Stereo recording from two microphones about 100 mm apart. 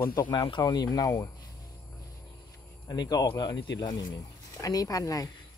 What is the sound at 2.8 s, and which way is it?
Speech, 40° left (ahead or behind).